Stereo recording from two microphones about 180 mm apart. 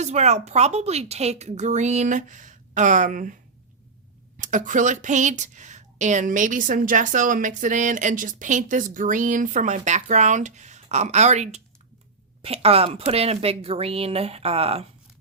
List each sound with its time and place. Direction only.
0.0 s a woman's voice: 40° right (ahead or behind)
4.4 s a woman's voice: 45° right (ahead or behind)